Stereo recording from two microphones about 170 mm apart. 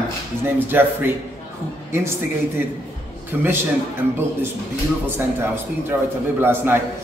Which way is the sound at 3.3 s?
10° right (ahead or behind).